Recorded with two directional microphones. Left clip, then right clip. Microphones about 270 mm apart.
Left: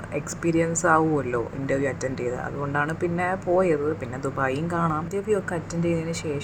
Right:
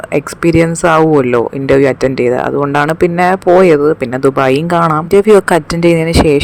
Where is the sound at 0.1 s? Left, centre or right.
Right.